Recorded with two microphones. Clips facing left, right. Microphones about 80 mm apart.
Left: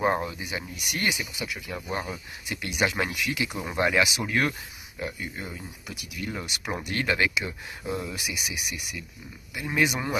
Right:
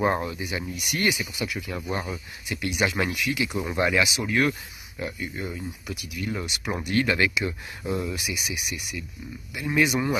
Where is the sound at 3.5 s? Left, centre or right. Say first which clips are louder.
Right 4 dB; centre.